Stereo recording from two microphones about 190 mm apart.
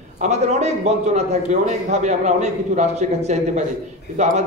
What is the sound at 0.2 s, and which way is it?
A man's voice, 35° right (ahead or behind).